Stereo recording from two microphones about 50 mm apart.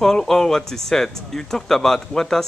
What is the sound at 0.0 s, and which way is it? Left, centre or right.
A man's voice, centre.